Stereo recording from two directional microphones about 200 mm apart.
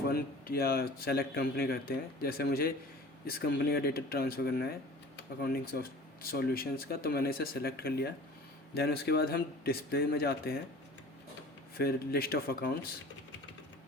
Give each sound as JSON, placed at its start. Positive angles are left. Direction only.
{"t": 0.1, "sound": "speech", "side_deg": 50}
{"t": 11.8, "sound": "speech", "side_deg": 50}